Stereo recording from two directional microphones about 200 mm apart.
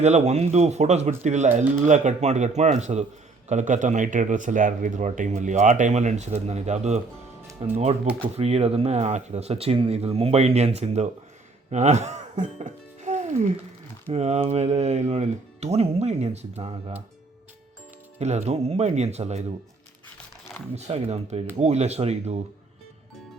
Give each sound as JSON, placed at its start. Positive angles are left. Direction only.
{"t": 0.0, "sound": "speech", "side_deg": -35}
{"t": 18.2, "sound": "speech", "side_deg": -35}
{"t": 20.7, "sound": "speech", "side_deg": -35}